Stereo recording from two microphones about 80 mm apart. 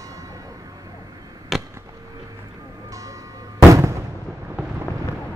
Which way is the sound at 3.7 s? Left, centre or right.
Right.